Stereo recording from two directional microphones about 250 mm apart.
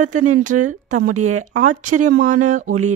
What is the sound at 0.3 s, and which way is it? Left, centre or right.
Speech, right.